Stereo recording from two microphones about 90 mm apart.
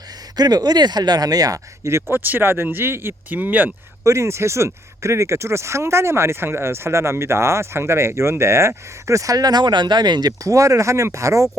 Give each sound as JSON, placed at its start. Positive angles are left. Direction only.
{"t": 0.3, "sound": "speech", "side_deg": -50}
{"t": 4.0, "sound": "speech", "side_deg": -35}